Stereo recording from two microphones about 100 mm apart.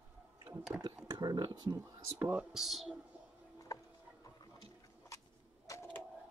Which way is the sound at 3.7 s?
35° left (ahead or behind).